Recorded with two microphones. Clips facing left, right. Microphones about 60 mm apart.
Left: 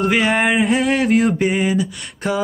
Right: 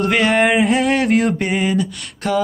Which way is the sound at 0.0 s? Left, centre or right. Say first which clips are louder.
Right 1 dB; centre.